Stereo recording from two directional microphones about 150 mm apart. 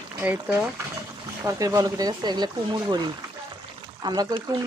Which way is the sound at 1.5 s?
25° right (ahead or behind).